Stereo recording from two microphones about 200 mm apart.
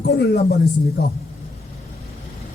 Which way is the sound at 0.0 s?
55° left (ahead or behind).